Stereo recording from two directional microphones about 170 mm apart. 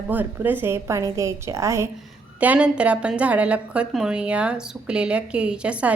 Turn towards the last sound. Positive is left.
turn(degrees=-5)  # may be behind; listen again after turning